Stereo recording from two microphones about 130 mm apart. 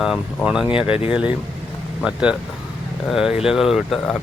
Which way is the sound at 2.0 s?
5° right (ahead or behind).